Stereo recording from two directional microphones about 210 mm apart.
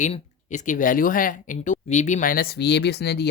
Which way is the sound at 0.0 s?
35° left (ahead or behind).